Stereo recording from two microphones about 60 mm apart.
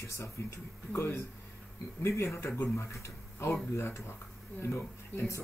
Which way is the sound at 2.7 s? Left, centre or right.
Left.